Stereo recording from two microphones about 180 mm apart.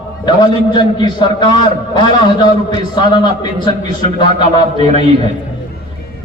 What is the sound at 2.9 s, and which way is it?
Speech, 25° left (ahead or behind).